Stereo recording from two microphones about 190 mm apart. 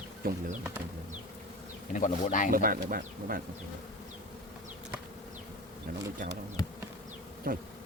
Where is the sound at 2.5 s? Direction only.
50° right (ahead or behind).